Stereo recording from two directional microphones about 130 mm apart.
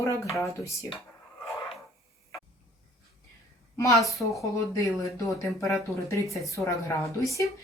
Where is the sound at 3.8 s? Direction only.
25° left (ahead or behind).